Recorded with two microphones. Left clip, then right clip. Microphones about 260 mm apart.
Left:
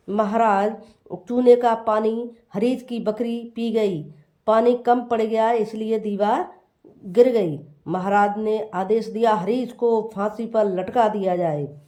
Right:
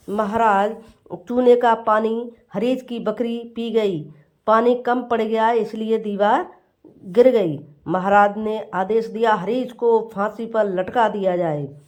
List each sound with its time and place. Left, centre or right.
0.1 s speech: centre